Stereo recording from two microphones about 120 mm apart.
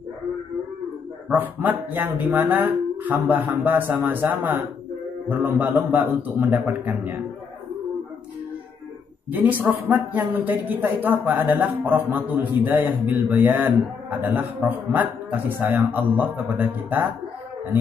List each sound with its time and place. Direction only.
1.3 s speech: 15° right (ahead or behind)
9.3 s speech: 15° right (ahead or behind)